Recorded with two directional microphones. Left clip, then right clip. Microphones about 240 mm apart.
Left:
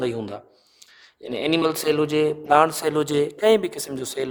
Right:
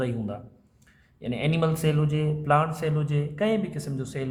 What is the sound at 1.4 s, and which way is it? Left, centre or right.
Speech, left.